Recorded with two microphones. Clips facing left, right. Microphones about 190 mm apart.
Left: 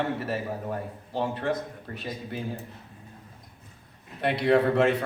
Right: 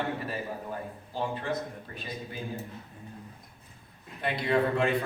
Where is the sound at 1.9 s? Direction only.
70° left (ahead or behind).